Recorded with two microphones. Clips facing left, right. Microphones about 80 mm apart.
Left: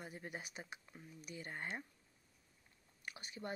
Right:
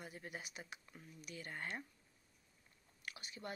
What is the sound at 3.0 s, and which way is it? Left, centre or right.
Speech, left.